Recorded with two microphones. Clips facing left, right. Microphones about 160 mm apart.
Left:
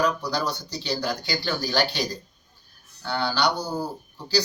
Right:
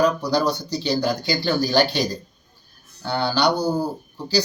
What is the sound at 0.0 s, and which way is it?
Speech, 20° right (ahead or behind).